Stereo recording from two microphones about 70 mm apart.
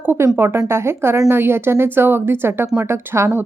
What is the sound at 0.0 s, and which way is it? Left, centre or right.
A woman's voice, right.